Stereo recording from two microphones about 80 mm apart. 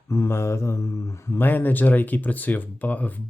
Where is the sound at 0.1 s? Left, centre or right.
Left.